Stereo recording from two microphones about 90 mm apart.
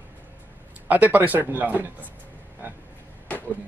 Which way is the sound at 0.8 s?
20° right (ahead or behind).